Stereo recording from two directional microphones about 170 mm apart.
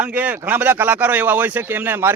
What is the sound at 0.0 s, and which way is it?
A man's voice, 10° right (ahead or behind).